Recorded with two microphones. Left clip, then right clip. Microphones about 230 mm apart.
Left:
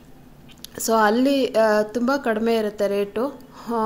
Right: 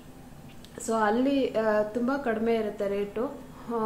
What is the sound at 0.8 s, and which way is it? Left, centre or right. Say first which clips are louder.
Speech: left 7 dB; left.